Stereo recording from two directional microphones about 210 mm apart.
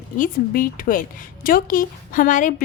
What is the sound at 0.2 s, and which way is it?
A woman's voice, 40° left (ahead or behind).